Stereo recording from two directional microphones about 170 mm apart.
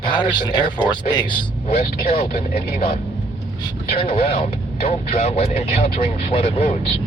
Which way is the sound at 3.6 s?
30° left (ahead or behind).